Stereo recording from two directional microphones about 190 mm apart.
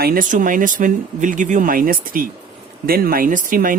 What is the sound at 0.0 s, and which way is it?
Speech, 50° right (ahead or behind).